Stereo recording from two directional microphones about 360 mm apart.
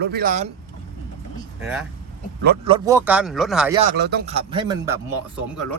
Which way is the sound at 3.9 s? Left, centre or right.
Right.